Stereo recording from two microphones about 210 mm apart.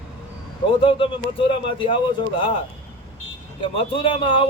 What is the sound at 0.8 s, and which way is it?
A man's voice, 25° left (ahead or behind).